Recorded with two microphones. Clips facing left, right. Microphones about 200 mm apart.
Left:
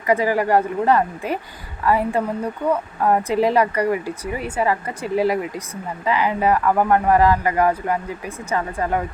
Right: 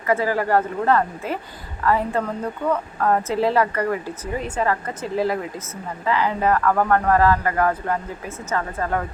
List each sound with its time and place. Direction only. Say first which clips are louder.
0.1 s a woman's voice: left 2 dB; 15° left (ahead or behind)